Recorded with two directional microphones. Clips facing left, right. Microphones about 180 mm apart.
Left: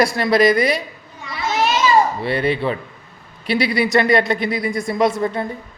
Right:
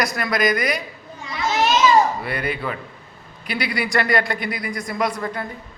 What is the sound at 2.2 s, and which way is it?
Speech, 30° left (ahead or behind).